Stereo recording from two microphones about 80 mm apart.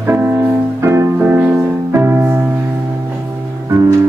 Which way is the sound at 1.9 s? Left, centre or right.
Right.